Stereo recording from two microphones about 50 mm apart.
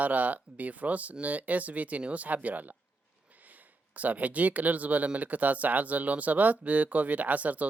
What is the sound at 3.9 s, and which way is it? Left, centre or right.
Speech, right.